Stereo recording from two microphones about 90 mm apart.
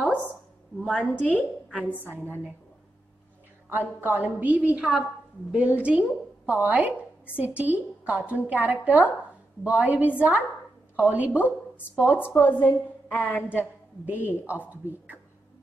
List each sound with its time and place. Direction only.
0.8 s a woman's voice: 15° left (ahead or behind)
3.7 s a woman's voice: 25° right (ahead or behind)
12.4 s a woman's voice: 20° left (ahead or behind)
14.0 s speech: 20° right (ahead or behind)